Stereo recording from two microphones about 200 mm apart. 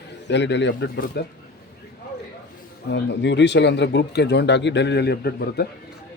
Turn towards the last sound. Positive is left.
turn(degrees=50)  # may be behind; listen again after turning